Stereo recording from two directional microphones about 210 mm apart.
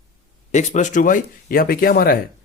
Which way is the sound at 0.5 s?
35° left (ahead or behind).